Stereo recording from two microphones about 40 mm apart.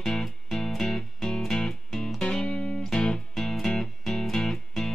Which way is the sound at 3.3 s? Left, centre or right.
Centre.